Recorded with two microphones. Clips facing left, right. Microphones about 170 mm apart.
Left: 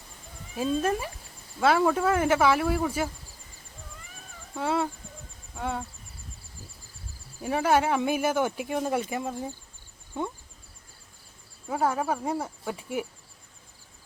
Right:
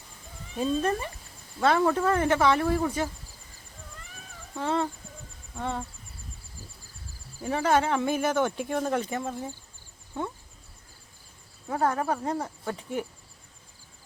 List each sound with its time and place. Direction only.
0.5 s speech: 5° left (ahead or behind)
4.5 s speech: 5° left (ahead or behind)
7.4 s speech: 10° left (ahead or behind)
11.7 s speech: 5° left (ahead or behind)